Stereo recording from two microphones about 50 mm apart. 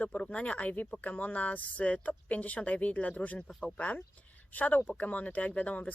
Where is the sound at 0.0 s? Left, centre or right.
Left.